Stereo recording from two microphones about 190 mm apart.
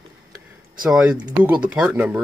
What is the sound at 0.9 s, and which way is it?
Speech, 5° right (ahead or behind).